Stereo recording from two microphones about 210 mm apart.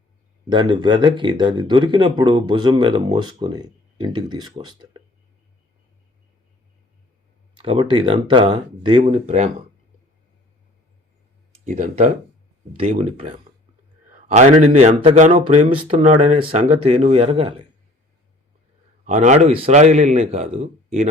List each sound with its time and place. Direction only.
0.5 s speech: 20° right (ahead or behind)
7.6 s speech: 25° right (ahead or behind)
11.5 s a man's voice: 30° right (ahead or behind)
14.3 s speech: 35° right (ahead or behind)
19.0 s a man's voice: 35° right (ahead or behind)